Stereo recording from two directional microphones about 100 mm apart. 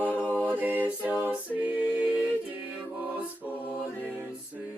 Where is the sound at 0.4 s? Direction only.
20° right (ahead or behind).